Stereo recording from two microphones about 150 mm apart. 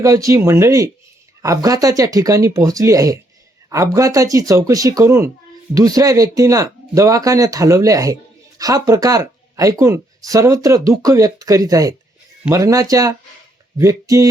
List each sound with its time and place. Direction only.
0.0 s speech: 20° right (ahead or behind)